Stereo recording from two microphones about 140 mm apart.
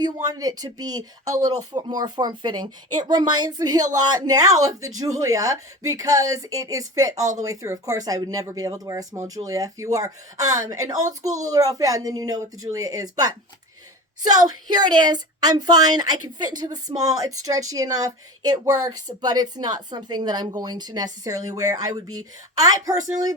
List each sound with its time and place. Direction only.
0.0 s speech: 30° right (ahead or behind)